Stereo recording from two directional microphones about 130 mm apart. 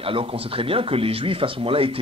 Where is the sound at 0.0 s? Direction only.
45° right (ahead or behind).